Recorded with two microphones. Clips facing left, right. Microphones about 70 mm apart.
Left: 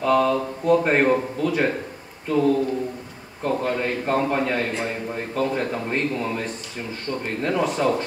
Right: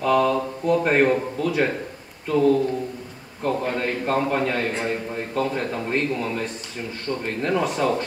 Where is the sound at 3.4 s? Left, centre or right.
Centre.